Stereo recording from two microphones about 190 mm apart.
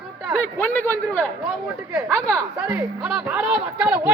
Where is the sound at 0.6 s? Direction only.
10° left (ahead or behind).